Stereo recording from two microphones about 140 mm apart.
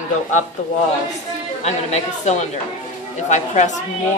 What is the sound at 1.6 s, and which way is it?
Speech, 55° left (ahead or behind).